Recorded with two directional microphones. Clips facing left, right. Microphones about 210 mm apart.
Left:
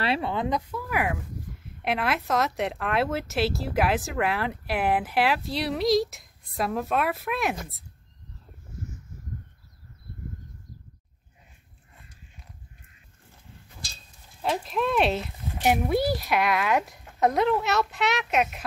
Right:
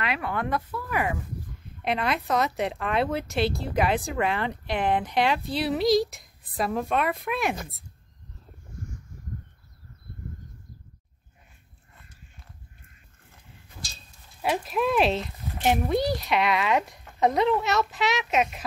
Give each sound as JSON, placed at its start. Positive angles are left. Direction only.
{"t": 0.0, "sound": "a woman's voice", "side_deg": 30}
{"t": 14.4, "sound": "a woman's voice", "side_deg": -5}